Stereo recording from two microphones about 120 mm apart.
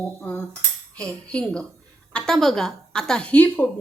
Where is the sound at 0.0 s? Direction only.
15° left (ahead or behind).